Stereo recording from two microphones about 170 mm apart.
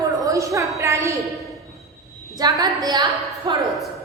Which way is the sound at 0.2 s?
20° right (ahead or behind).